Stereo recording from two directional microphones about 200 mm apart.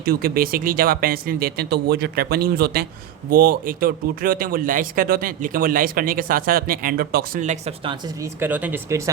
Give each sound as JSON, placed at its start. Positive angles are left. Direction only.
{"t": 0.0, "sound": "speech", "side_deg": -45}
{"t": 8.2, "sound": "speech", "side_deg": -10}